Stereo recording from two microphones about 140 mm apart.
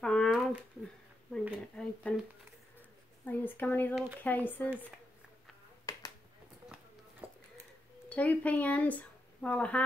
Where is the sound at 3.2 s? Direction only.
15° left (ahead or behind).